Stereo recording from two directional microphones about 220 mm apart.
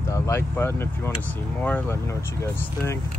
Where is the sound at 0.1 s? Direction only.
10° left (ahead or behind).